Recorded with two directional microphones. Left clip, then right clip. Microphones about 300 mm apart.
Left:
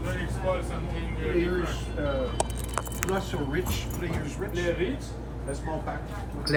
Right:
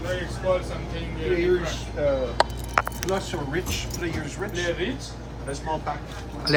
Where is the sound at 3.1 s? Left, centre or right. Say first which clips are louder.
Even; right.